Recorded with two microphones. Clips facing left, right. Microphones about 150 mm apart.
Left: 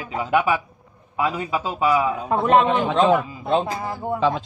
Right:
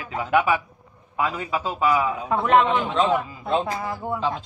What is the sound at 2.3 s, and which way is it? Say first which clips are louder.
A man's voice: left 1 dB; 35° left (ahead or behind).